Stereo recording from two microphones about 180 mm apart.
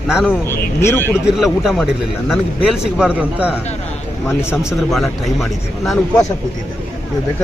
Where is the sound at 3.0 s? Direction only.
5° right (ahead or behind).